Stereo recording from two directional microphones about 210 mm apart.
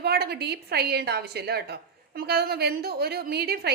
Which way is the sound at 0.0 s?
50° right (ahead or behind).